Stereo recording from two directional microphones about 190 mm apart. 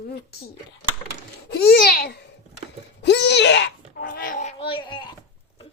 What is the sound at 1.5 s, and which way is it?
A child's voice, 55° left (ahead or behind).